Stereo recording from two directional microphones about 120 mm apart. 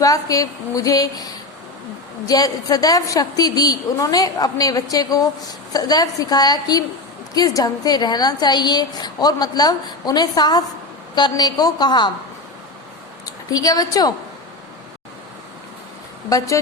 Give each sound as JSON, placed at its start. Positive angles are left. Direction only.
{"t": 0.0, "sound": "a woman's voice", "side_deg": 30}
{"t": 13.2, "sound": "a woman's voice", "side_deg": 30}